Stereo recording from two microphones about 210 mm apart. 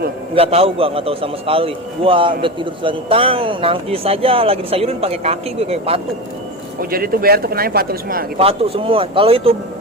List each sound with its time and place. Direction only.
0.3 s a man's voice: 25° right (ahead or behind)
6.9 s speech: 45° right (ahead or behind)
8.4 s a man's voice: 25° right (ahead or behind)